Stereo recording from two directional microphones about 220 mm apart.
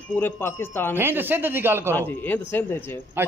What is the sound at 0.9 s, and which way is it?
Speech, 10° right (ahead or behind).